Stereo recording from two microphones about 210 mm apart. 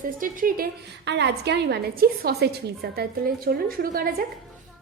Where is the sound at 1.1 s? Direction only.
55° right (ahead or behind).